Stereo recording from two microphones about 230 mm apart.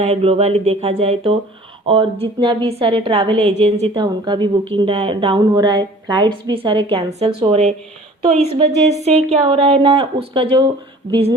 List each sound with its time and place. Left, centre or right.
0.0 s a woman's voice: right